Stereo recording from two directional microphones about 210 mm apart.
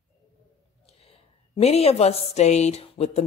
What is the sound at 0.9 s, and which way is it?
Speech, 30° left (ahead or behind).